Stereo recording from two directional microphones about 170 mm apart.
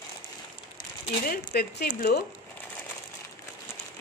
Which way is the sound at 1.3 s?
65° left (ahead or behind).